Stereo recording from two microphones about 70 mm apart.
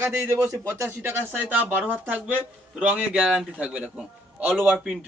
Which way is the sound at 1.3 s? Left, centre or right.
Right.